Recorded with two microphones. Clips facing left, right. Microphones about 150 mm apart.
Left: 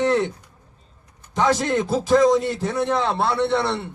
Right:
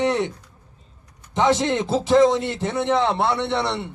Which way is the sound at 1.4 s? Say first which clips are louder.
Right 1 dB; 20° right (ahead or behind).